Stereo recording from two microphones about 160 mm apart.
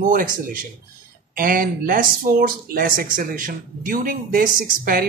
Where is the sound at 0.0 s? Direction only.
60° right (ahead or behind).